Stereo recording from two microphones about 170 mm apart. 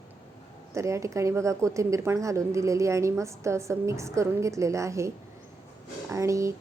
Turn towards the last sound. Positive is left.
turn(degrees=-20)  # may be behind; listen again after turning